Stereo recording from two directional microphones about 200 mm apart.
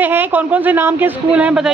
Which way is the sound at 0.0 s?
10° right (ahead or behind).